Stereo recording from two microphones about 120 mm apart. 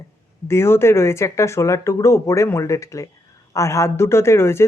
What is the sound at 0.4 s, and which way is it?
Speech, 20° left (ahead or behind).